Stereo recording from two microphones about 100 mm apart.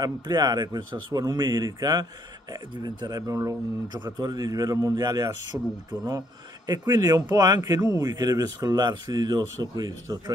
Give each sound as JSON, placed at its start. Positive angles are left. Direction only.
{"t": 0.0, "sound": "speech", "side_deg": -40}
{"t": 3.9, "sound": "speech", "side_deg": -45}
{"t": 5.5, "sound": "speech", "side_deg": -10}
{"t": 5.9, "sound": "speech", "side_deg": -40}